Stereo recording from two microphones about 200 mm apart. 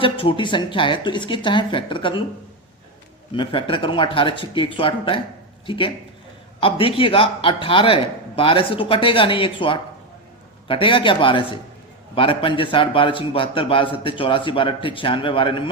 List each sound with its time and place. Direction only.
0.0 s a man's voice: 25° left (ahead or behind)
3.3 s a man's voice: 25° left (ahead or behind)